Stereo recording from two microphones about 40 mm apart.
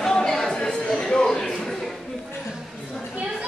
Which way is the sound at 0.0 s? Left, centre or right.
Centre.